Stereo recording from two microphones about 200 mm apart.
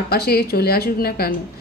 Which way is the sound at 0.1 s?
50° left (ahead or behind).